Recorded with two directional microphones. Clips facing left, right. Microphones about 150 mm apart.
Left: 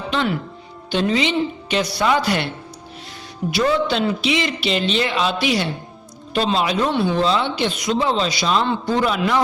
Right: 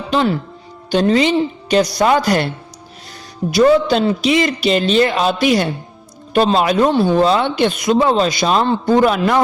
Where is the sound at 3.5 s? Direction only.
40° right (ahead or behind).